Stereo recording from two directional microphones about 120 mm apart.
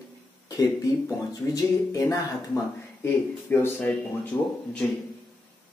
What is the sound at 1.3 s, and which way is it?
Speech, 30° left (ahead or behind).